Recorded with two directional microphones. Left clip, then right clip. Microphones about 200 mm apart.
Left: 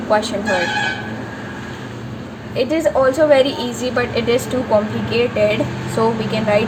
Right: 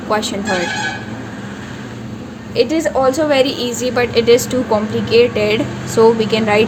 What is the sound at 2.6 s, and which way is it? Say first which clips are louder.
A woman's voice: right 1 dB; 50° right (ahead or behind).